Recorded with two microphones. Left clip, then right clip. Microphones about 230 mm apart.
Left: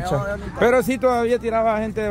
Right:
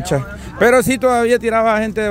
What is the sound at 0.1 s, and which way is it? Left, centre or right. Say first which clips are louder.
Speech: right 6 dB; right.